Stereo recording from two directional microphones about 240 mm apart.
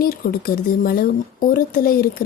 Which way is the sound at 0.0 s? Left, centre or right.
Left.